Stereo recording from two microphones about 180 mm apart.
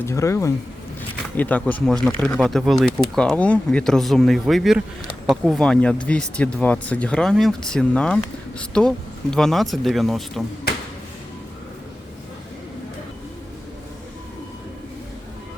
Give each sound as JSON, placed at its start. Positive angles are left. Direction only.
{"t": 0.0, "sound": "speech", "side_deg": 15}